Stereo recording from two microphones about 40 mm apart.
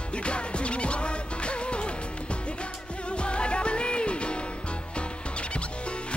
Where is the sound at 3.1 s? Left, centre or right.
Left.